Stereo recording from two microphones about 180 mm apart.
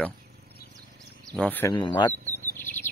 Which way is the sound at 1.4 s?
10° left (ahead or behind).